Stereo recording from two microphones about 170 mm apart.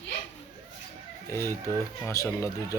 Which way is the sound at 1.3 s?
15° left (ahead or behind).